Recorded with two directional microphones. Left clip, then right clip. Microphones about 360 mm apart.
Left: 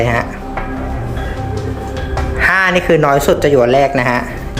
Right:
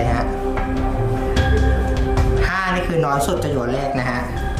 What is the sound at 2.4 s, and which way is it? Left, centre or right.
Music, centre.